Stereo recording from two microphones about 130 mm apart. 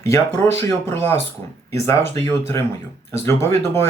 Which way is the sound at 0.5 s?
20° left (ahead or behind).